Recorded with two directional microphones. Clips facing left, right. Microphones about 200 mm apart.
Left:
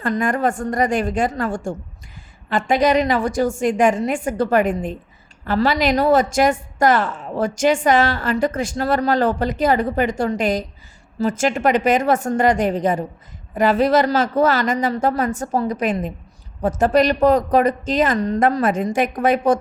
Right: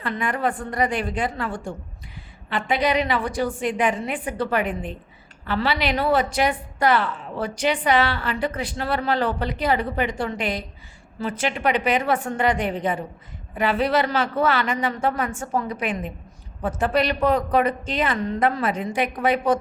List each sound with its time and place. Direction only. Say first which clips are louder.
0.0 s a woman's voice: left 5 dB; 45° left (ahead or behind)